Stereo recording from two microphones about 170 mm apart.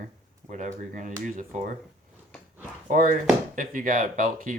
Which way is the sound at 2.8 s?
50° right (ahead or behind).